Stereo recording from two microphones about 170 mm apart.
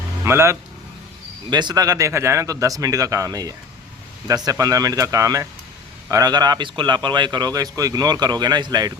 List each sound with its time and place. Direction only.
0.3 s speech: 15° right (ahead or behind)
1.5 s a man's voice: 25° right (ahead or behind)